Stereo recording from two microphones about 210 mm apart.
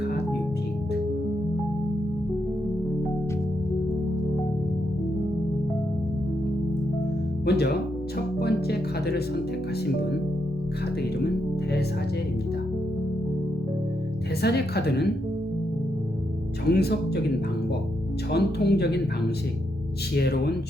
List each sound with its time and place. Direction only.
7.4 s speech: 50° left (ahead or behind)
8.4 s music: 50° left (ahead or behind)
14.4 s a woman's voice: 50° left (ahead or behind)
16.6 s a woman's voice: 50° left (ahead or behind)
18.3 s a woman's voice: 50° left (ahead or behind)
20.1 s a woman's voice: 50° left (ahead or behind)